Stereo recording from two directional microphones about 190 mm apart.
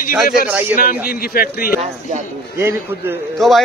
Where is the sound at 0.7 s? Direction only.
50° left (ahead or behind).